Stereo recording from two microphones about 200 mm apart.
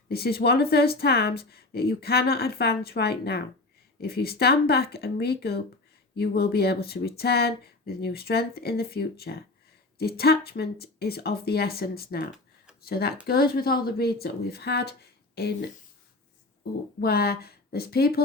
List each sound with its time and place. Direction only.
0.1 s speech: 50° left (ahead or behind)
17.0 s speech: 50° left (ahead or behind)